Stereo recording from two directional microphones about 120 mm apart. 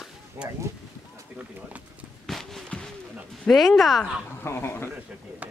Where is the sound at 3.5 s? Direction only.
Centre (ahead or behind).